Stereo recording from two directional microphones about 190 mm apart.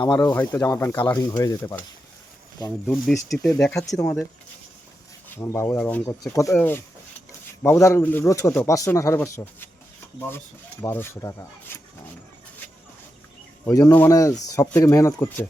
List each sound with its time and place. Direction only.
0.1 s speech: 15° left (ahead or behind)
2.8 s speech: centre (ahead or behind)
3.9 s speech: 10° left (ahead or behind)
5.3 s speech: 15° left (ahead or behind)
13.7 s speech: 15° left (ahead or behind)